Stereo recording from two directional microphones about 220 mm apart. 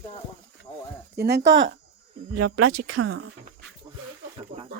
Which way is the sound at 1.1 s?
50° right (ahead or behind).